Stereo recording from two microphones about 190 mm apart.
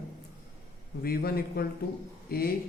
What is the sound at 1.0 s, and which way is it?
Speech, 55° left (ahead or behind).